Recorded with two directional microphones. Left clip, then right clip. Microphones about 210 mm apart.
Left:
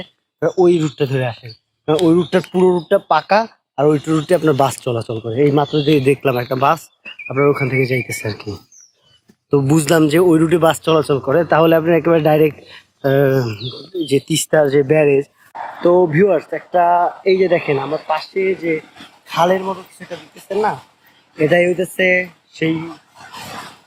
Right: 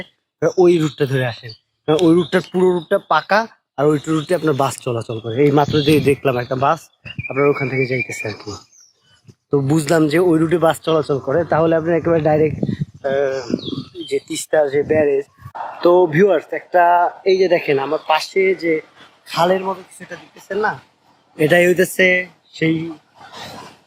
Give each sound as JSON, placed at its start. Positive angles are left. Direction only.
{"t": 0.3, "sound": "speech", "side_deg": -10}
{"t": 2.4, "sound": "speech", "side_deg": 5}
{"t": 5.4, "sound": "speech", "side_deg": -10}
{"t": 9.5, "sound": "speech", "side_deg": 10}
{"t": 15.8, "sound": "speech", "side_deg": -10}
{"t": 18.1, "sound": "speech", "side_deg": -35}
{"t": 19.3, "sound": "speech", "side_deg": -5}
{"t": 19.8, "sound": "speech", "side_deg": 55}
{"t": 21.5, "sound": "speech", "side_deg": -15}
{"t": 22.1, "sound": "speech", "side_deg": -5}